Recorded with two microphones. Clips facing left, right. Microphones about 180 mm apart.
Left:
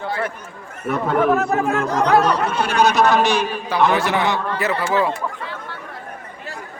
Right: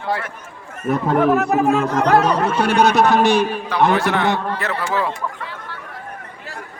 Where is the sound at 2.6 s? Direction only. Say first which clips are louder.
Right 2 dB; 65° right (ahead or behind).